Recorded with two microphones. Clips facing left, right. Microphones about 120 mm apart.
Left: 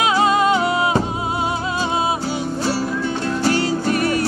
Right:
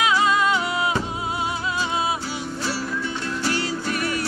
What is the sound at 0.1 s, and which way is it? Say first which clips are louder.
Music: left 4 dB; 45° left (ahead or behind).